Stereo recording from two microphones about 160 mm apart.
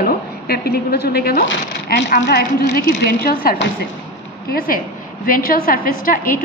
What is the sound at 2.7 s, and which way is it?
Speech, 85° left.